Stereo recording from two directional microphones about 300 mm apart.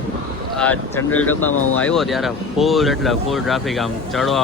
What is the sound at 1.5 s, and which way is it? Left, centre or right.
Speech, left.